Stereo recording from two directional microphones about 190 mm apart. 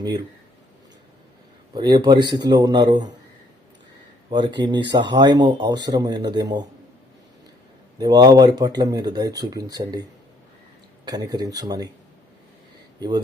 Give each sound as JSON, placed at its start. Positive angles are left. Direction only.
{"t": 1.7, "sound": "speech", "side_deg": -25}
{"t": 4.3, "sound": "speech", "side_deg": -25}
{"t": 7.9, "sound": "speech", "side_deg": -20}
{"t": 13.0, "sound": "speech", "side_deg": -20}